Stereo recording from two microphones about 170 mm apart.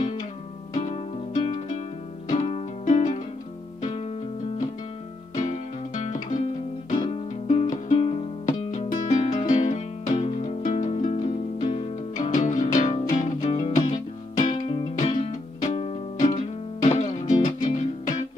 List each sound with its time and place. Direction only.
0.7 s music: 40° left (ahead or behind)
5.3 s music: 45° left (ahead or behind)
14.4 s music: 30° left (ahead or behind)
15.0 s music: 45° left (ahead or behind)